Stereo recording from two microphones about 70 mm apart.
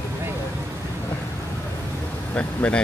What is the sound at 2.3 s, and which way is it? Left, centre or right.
Speech, centre.